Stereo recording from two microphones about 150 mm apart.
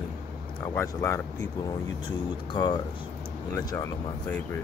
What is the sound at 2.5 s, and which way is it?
Speech, 30° left (ahead or behind).